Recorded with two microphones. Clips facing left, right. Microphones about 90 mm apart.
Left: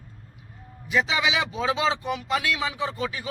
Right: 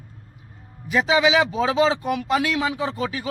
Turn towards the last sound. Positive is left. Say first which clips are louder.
# right 3 dB
turn(degrees=-45)  # may be behind; listen again after turning